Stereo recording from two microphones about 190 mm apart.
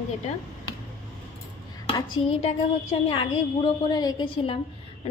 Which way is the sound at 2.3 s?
30° left (ahead or behind).